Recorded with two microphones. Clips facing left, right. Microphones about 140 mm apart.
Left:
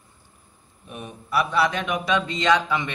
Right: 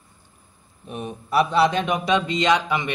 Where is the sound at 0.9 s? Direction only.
25° right (ahead or behind).